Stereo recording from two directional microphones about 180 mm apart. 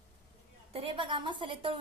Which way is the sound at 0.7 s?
30° right (ahead or behind).